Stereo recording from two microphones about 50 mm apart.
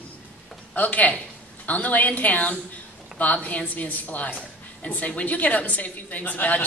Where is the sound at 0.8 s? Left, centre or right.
Left.